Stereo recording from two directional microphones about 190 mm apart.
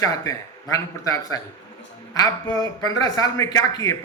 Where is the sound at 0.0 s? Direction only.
15° left (ahead or behind).